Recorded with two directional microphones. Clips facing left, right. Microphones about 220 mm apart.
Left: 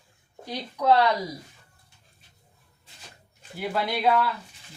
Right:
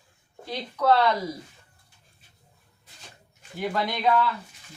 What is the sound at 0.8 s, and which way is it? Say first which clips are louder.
Speech: even; 15° left (ahead or behind).